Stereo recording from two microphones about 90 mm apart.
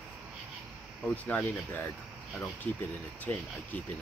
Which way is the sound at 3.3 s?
20° left (ahead or behind).